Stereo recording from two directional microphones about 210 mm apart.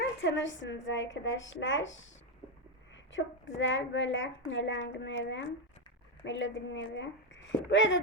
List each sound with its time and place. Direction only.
0.0 s a woman's voice: 60° left (ahead or behind)
3.1 s a woman's voice: 65° left (ahead or behind)